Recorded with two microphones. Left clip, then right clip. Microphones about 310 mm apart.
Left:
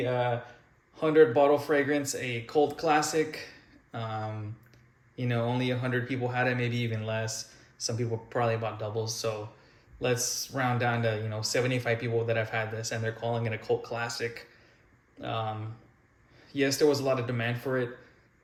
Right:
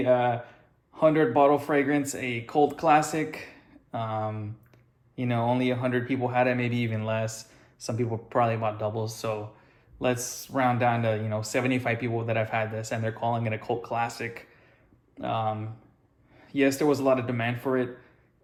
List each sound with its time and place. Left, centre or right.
0.0 s speech: centre